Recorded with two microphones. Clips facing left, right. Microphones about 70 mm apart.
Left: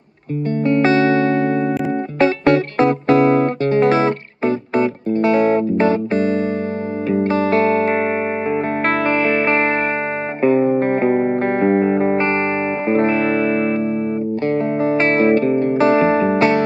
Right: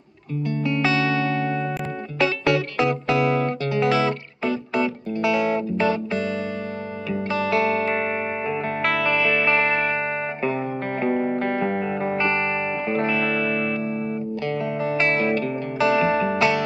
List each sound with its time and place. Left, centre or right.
0.5 s music: left